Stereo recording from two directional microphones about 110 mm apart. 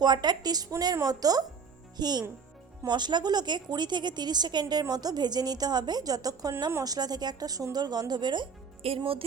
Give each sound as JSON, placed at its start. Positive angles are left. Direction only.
{"t": 0.0, "sound": "speech", "side_deg": -40}